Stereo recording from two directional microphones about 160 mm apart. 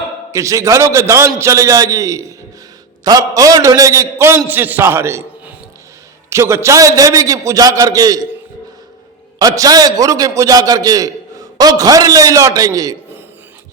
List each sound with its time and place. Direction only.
0.3 s a man's voice: 20° right (ahead or behind)
9.4 s a man's voice: 25° right (ahead or behind)